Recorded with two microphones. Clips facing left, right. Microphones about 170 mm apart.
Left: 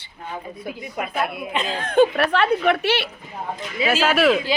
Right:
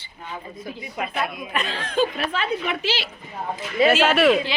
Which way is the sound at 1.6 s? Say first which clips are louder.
Left 7 dB; 50° left (ahead or behind).